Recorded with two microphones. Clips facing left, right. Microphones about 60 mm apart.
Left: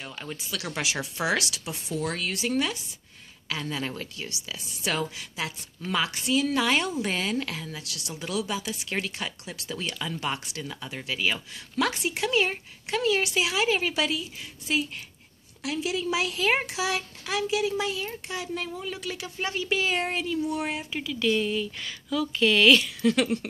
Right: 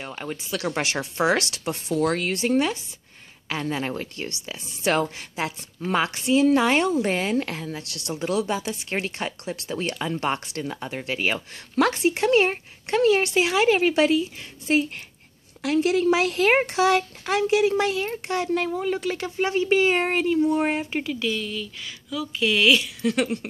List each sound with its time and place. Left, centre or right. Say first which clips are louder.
0.0 s speech: right 5 dB; right
2.1 s speech: right 5 dB; right
15.6 s a woman's voice: right 9 dB; right
19.3 s speech: right 7 dB; right
21.4 s speech: left 4 dB; left
21.8 s speech: left 2 dB; centre
23.1 s a sound: right 1 dB; centre